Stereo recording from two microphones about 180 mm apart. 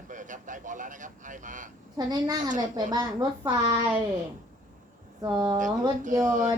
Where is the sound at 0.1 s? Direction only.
45° right (ahead or behind).